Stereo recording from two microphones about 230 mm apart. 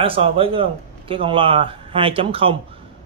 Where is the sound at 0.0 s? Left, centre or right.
Right.